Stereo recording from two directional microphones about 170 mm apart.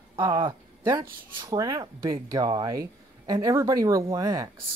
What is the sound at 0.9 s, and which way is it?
Speech, 20° right (ahead or behind).